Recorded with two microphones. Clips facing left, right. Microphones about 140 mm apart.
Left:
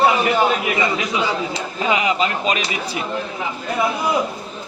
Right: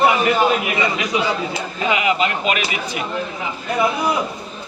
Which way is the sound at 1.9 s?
30° left (ahead or behind).